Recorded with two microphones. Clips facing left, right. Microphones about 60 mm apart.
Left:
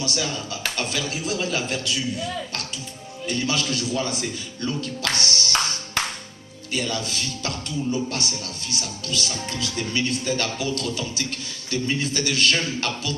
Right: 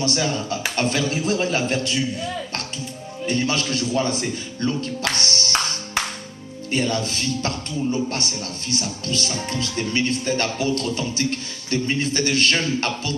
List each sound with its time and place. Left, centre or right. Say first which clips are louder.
0.0 s speech: right 5 dB; right
5.1 s music: right 1 dB; right
6.7 s speech: right 4 dB; right